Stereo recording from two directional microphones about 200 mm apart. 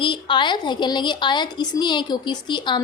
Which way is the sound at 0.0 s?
25° left (ahead or behind).